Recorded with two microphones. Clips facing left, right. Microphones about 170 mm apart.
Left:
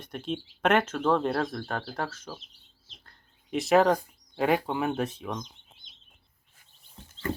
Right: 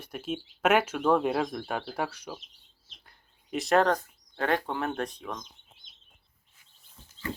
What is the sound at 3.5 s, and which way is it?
Speech, centre (ahead or behind).